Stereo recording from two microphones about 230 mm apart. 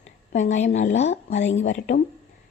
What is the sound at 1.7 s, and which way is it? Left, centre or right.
Speech, left.